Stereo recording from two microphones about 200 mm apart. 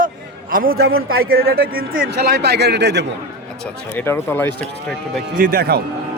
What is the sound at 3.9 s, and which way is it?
Speech, 10° left (ahead or behind).